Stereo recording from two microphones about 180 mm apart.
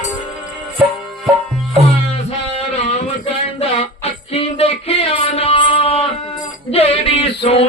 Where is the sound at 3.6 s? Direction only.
35° left (ahead or behind).